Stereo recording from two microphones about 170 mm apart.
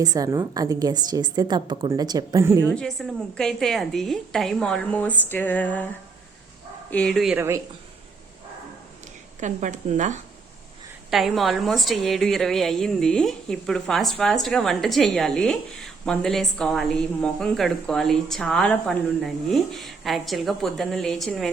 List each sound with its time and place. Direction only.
0.0 s a woman's voice: 20° right (ahead or behind)
2.7 s a woman's voice: 5° left (ahead or behind)
6.9 s a woman's voice: 5° left (ahead or behind)
7.3 s speech: 15° right (ahead or behind)
9.4 s speech: 45° right (ahead or behind)
11.1 s a woman's voice: centre (ahead or behind)